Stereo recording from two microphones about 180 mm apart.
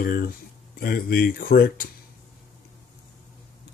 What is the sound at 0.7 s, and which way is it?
Speech, 55° left (ahead or behind).